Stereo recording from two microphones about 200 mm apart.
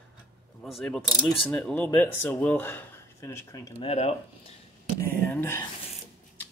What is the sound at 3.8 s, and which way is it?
Speech, 30° left (ahead or behind).